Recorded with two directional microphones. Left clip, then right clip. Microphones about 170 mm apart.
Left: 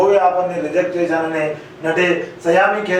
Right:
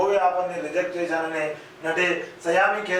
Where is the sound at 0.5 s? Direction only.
10° left (ahead or behind).